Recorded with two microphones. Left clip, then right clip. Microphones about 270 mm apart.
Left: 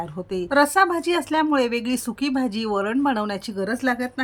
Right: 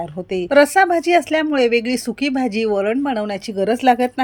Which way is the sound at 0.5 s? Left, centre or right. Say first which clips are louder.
Right 5 dB; centre.